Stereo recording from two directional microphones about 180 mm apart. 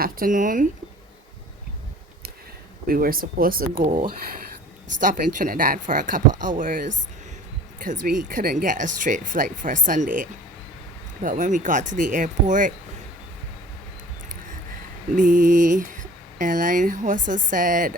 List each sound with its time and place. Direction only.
0.0 s speech: 50° right (ahead or behind)
2.8 s speech: 55° right (ahead or behind)
5.0 s speech: 50° right (ahead or behind)
15.1 s speech: 45° right (ahead or behind)